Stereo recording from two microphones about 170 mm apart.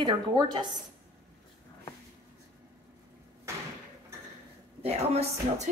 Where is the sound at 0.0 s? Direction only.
25° right (ahead or behind).